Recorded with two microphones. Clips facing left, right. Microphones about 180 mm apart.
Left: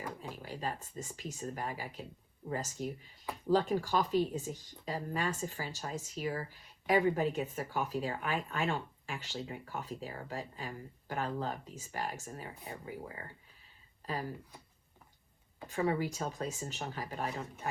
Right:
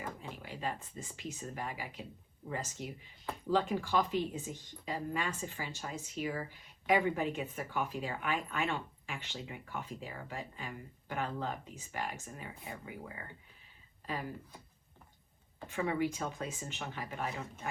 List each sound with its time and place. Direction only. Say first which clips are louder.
0.2 s speech: left 1 dB; 40° left (ahead or behind)
14.0 s speech: left 1 dB; 40° left (ahead or behind)
15.7 s speech: left 1 dB; 40° left (ahead or behind)